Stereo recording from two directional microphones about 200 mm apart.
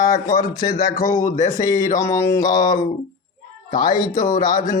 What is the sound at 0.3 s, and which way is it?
Speech, 20° left (ahead or behind).